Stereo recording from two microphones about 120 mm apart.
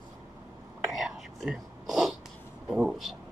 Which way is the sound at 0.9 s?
Centre (ahead or behind).